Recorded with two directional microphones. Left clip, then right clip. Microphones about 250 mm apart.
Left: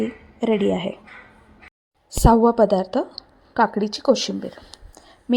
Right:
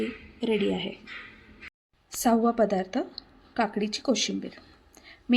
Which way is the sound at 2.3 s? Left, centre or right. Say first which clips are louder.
Left 8 dB; centre.